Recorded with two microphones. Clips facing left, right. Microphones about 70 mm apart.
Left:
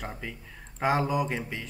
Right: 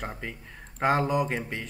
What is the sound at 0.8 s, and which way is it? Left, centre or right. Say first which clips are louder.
Speech: right 2 dB; centre.